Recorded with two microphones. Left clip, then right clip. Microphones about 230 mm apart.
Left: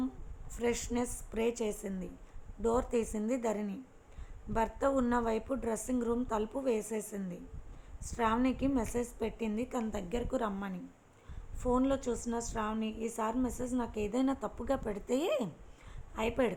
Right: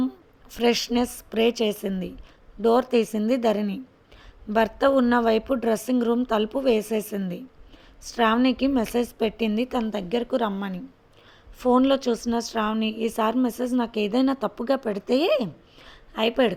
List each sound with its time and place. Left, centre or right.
0.5 s a woman's voice: right